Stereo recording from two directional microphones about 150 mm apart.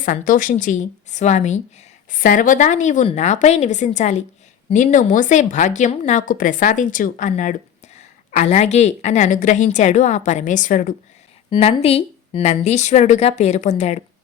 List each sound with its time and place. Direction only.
0.0 s a woman's voice: 60° left (ahead or behind)
2.0 s a woman's voice: 65° left (ahead or behind)
11.5 s a woman's voice: 40° left (ahead or behind)